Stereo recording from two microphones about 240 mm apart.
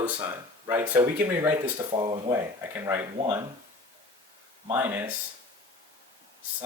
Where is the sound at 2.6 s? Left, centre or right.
Centre.